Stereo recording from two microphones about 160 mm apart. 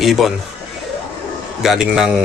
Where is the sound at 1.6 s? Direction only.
Centre (ahead or behind).